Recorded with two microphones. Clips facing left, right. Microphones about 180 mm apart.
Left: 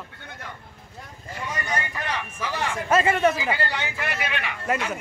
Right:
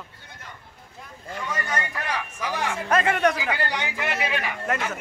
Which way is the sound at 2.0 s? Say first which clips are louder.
Even; 10° right (ahead or behind).